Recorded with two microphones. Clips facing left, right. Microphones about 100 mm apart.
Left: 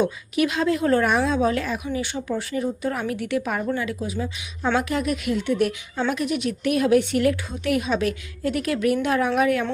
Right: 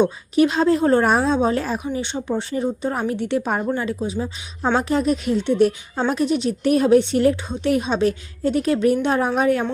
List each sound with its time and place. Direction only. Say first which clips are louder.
0.0 s speech: right 5 dB; 30° right (ahead or behind)